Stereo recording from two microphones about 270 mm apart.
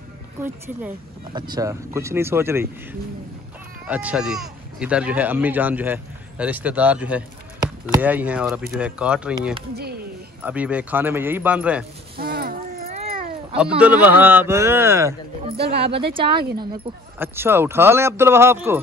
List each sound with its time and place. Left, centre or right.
0.4 s speech: centre
9.8 s speech: right
10.4 s speech: centre
12.2 s a sound: right
13.6 s speech: centre
15.5 s speech: right
15.8 s speech: centre
17.2 s speech: centre